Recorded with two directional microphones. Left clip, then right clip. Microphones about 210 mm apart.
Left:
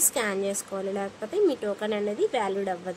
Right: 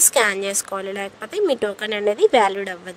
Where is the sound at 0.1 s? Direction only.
45° right (ahead or behind).